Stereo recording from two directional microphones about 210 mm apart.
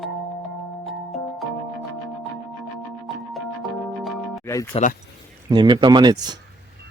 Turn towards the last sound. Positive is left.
turn(degrees=-20)  # may be behind; listen again after turning